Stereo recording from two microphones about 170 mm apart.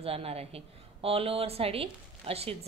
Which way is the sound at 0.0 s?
35° right (ahead or behind).